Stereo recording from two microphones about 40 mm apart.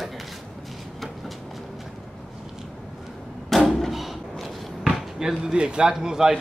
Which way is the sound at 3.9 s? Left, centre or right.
Centre.